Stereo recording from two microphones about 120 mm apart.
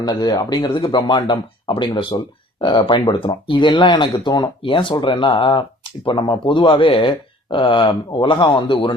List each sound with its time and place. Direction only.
0.0 s speech: 35° left (ahead or behind)